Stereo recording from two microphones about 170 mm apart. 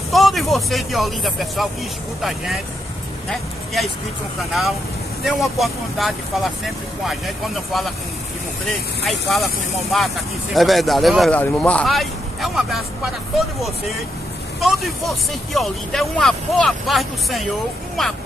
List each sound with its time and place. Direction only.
0.1 s speech: centre (ahead or behind)
5.2 s speech: centre (ahead or behind)
9.0 s speech: centre (ahead or behind)
14.6 s speech: centre (ahead or behind)